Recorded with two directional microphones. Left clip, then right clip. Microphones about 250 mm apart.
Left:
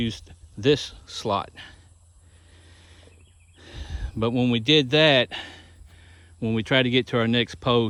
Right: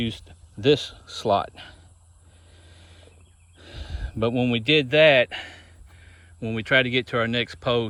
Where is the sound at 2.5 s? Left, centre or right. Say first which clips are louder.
Even; centre.